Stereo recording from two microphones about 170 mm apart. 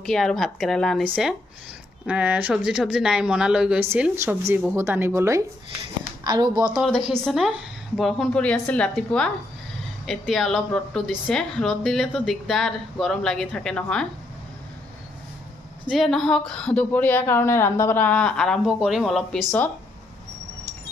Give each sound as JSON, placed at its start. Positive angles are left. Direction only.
{"t": 0.0, "sound": "a woman's voice", "side_deg": 0}
{"t": 2.0, "sound": "a woman's voice", "side_deg": -5}
{"t": 6.9, "sound": "a woman's voice", "side_deg": 5}
{"t": 15.9, "sound": "a woman's voice", "side_deg": 0}